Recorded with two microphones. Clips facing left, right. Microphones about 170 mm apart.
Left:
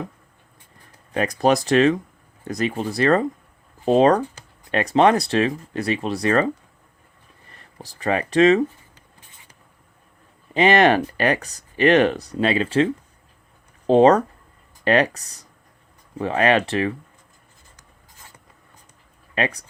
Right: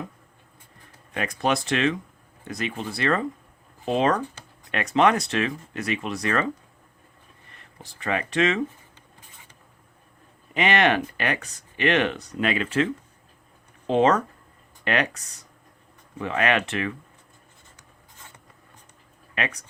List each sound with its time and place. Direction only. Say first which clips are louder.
1.1 s speech: left 6 dB; 40° left (ahead or behind)
7.5 s speech: left 5 dB; 35° left (ahead or behind)
10.5 s speech: left 6 dB; 35° left (ahead or behind)
19.3 s speech: left 6 dB; 35° left (ahead or behind)